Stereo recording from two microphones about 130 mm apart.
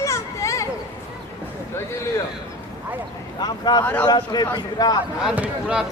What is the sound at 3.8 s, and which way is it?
Speech, 10° left (ahead or behind).